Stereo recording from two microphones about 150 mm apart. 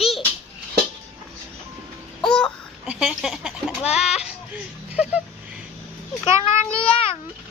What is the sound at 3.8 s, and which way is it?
Speech, 45° left (ahead or behind).